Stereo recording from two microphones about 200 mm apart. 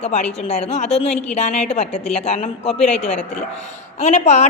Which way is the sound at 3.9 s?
35° left (ahead or behind).